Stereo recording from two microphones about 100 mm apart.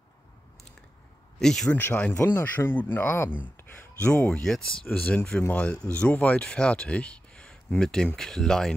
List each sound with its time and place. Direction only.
1.4 s speech: 5° left (ahead or behind)
1.7 s speech: 15° left (ahead or behind)